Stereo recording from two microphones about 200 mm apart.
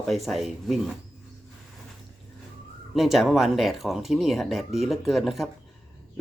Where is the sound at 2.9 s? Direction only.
Centre (ahead or behind).